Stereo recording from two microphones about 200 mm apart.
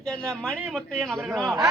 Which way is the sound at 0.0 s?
5° left (ahead or behind).